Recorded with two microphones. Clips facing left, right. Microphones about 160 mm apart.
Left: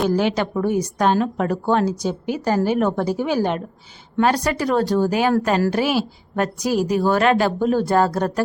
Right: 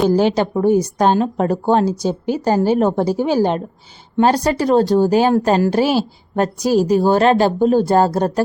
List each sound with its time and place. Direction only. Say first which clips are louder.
0.1 s a woman's voice: right 5 dB; 30° right (ahead or behind)